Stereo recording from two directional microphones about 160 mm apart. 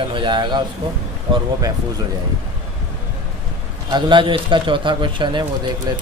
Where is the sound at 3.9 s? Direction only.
30° right (ahead or behind).